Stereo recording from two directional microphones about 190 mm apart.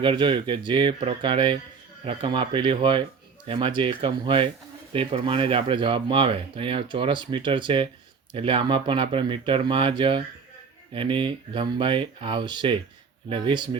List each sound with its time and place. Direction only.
0.0 s speech: 25° right (ahead or behind)